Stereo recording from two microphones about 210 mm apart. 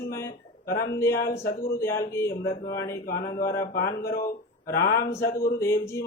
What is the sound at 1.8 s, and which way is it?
Speech, 10° left (ahead or behind).